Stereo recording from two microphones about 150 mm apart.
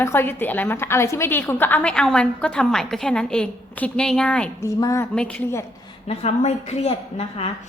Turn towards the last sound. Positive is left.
turn(degrees=40)  # may be behind; listen again after turning